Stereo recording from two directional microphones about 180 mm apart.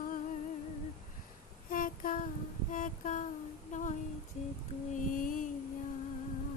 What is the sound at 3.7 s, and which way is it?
Female singing, 45° left (ahead or behind).